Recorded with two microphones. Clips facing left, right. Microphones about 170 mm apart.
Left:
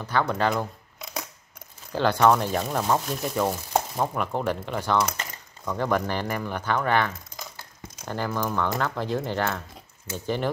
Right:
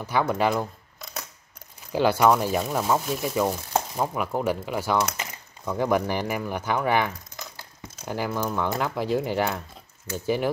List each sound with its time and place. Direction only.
0.0 s speech: 10° right (ahead or behind)
1.9 s speech: 10° right (ahead or behind)